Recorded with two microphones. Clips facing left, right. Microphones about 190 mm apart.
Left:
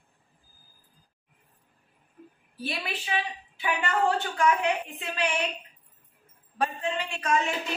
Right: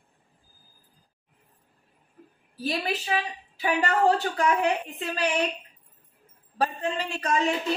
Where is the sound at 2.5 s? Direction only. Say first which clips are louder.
Right 5 dB; 40° right (ahead or behind).